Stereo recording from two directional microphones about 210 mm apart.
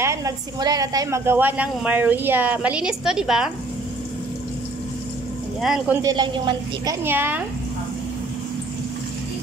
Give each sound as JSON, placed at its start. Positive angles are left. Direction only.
{"t": 0.0, "sound": "a woman's voice", "side_deg": -15}
{"t": 5.6, "sound": "speech", "side_deg": 0}
{"t": 6.0, "sound": "a woman's voice", "side_deg": -20}
{"t": 7.1, "sound": "a woman's voice", "side_deg": -10}